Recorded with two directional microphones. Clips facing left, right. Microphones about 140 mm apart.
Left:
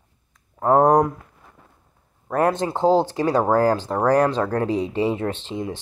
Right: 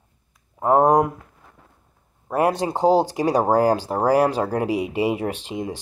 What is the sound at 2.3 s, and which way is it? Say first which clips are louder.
Speech: even; 10° right (ahead or behind).